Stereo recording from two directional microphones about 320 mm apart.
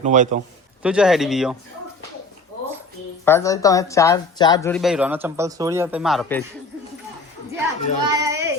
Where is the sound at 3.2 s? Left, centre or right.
Centre.